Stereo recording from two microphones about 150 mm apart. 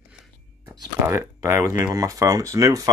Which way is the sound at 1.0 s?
15° right (ahead or behind).